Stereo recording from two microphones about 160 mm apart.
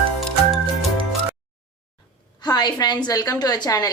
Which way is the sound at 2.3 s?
25° left (ahead or behind).